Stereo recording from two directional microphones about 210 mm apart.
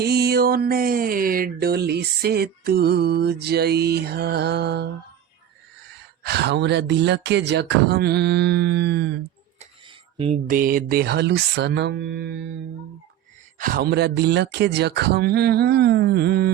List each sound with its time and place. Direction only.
0.0 s speech: 50° right (ahead or behind)
6.2 s speech: 55° right (ahead or behind)
9.6 s a sound: 25° right (ahead or behind)
10.5 s speech: 40° right (ahead or behind)
13.6 s speech: 45° right (ahead or behind)